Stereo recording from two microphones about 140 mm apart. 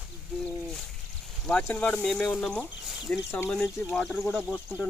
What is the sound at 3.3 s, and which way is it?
Speech, 20° left (ahead or behind).